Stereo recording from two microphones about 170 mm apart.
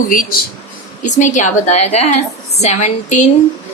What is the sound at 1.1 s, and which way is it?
A woman's voice, 45° left (ahead or behind).